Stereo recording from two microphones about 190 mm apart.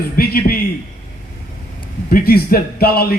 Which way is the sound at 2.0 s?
50° left (ahead or behind).